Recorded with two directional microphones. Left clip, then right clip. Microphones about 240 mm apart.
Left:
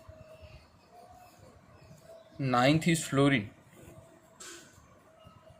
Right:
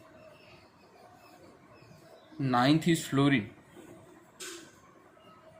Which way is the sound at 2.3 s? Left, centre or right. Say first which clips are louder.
Even; left.